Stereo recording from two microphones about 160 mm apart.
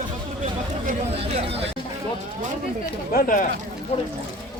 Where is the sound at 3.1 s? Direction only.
60° left (ahead or behind).